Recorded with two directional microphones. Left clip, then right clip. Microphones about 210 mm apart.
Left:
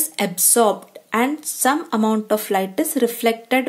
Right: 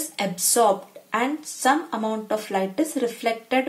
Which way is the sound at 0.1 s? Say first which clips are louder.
Left 4 dB; 50° left (ahead or behind).